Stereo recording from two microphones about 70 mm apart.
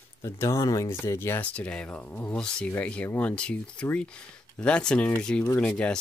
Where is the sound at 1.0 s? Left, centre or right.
Left.